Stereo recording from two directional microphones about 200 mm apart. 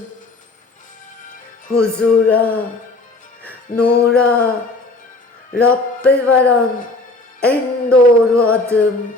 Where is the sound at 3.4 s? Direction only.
5° left (ahead or behind).